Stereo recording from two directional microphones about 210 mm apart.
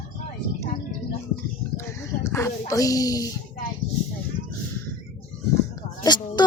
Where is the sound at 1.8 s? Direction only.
15° left (ahead or behind).